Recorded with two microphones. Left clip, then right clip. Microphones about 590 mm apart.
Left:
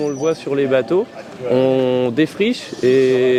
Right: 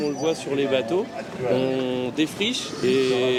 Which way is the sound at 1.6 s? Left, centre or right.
Left.